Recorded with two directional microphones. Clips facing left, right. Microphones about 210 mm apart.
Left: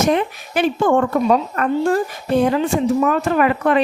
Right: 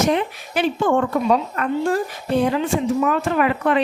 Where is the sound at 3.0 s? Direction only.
45° left (ahead or behind).